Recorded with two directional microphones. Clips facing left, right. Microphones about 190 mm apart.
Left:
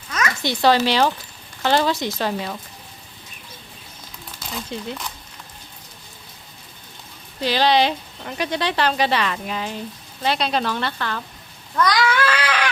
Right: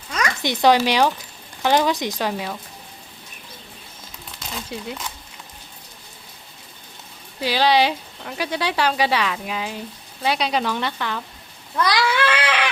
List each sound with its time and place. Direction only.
0.4 s speech: 15° right (ahead or behind)
4.4 s speech: 5° right (ahead or behind)
7.3 s speech: 10° right (ahead or behind)
11.8 s a sound: 30° right (ahead or behind)